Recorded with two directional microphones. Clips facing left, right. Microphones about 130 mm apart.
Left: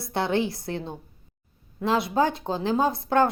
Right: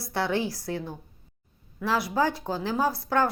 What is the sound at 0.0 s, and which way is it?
A woman's voice, 20° left (ahead or behind).